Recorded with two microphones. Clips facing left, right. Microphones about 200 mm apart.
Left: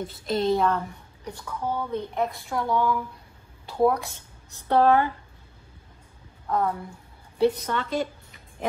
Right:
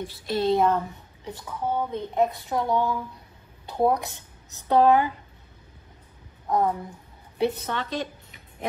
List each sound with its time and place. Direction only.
0.5 s a woman's voice: 20° right (ahead or behind)
6.5 s a woman's voice: 15° right (ahead or behind)